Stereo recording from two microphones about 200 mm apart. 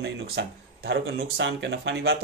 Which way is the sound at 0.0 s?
60° right (ahead or behind).